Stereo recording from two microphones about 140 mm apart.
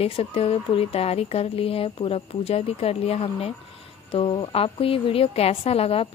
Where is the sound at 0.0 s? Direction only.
45° left (ahead or behind).